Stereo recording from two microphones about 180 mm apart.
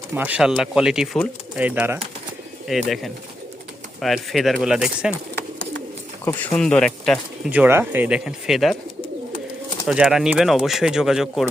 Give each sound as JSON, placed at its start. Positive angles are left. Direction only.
{"t": 0.1, "sound": "speech", "side_deg": -10}
{"t": 6.3, "sound": "speech", "side_deg": 15}
{"t": 6.6, "sound": "speech", "side_deg": 5}
{"t": 9.8, "sound": "speech", "side_deg": -5}